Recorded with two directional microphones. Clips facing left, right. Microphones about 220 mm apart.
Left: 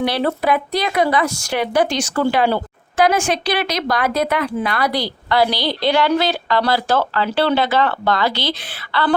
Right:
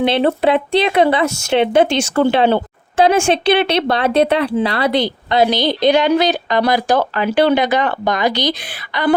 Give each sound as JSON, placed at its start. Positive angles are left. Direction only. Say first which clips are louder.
{"t": 0.0, "sound": "speech", "louder": "right 5 dB", "side_deg": -25}